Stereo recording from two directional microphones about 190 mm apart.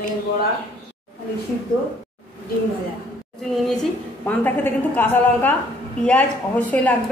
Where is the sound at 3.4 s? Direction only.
5° left (ahead or behind).